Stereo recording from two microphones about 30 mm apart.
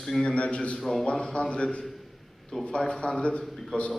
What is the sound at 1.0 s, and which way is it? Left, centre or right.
Speech, left.